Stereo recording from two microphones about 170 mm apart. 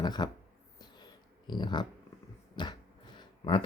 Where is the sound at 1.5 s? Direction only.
25° left (ahead or behind).